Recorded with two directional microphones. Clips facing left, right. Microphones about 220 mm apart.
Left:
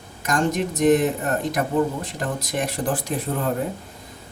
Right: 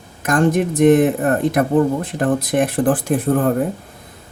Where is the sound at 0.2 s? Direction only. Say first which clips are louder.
Right 6 dB; 55° right (ahead or behind).